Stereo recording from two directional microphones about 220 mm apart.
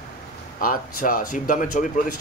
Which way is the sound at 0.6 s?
40° left (ahead or behind).